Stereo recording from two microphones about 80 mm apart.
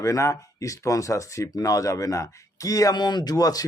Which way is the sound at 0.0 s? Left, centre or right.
Left.